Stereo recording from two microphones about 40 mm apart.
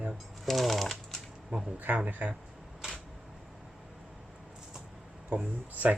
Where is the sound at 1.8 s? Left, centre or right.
Right.